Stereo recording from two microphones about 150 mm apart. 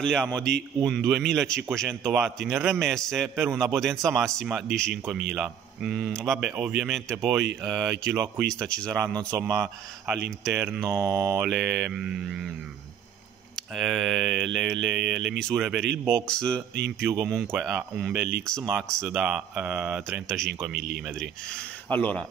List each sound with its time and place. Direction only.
0.0 s speech: 5° left (ahead or behind)
8.9 s mantra: 20° right (ahead or behind)
10.8 s mantra: 25° right (ahead or behind)
11.4 s speech: centre (ahead or behind)
13.6 s speech: centre (ahead or behind)
17.5 s speech: 5° right (ahead or behind)
18.6 s mantra: 10° right (ahead or behind)
18.9 s speech: 5° left (ahead or behind)
19.1 s mantra: 10° right (ahead or behind)
20.0 s speech: centre (ahead or behind)